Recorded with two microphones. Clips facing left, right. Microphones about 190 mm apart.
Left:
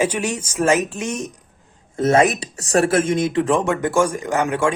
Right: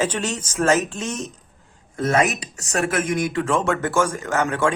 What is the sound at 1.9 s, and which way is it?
Speech, 25° left (ahead or behind).